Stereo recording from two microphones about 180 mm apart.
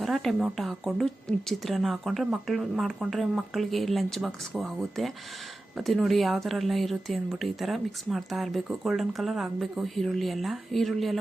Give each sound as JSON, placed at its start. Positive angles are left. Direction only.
{"t": 0.0, "sound": "speech", "side_deg": 0}